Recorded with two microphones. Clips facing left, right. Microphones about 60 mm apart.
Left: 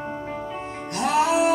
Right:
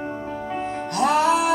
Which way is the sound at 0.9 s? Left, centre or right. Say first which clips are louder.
Right 3 dB; right.